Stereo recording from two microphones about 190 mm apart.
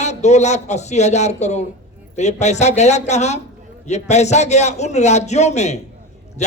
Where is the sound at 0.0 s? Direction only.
35° left (ahead or behind).